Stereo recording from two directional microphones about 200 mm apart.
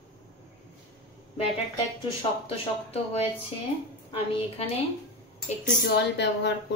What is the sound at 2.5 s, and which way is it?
Speech, 30° left (ahead or behind).